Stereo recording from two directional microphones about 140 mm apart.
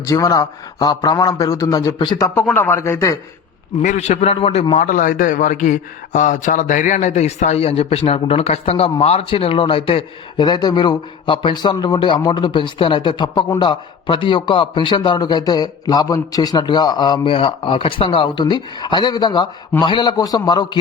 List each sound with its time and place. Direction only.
0.0 s a man's voice: 25° left (ahead or behind)
3.8 s speech: 55° left (ahead or behind)
4.7 s a man's voice: 70° left (ahead or behind); by 20.7 s 30° left (ahead or behind)